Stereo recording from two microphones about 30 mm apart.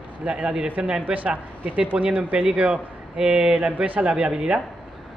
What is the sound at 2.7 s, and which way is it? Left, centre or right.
A man's voice, right.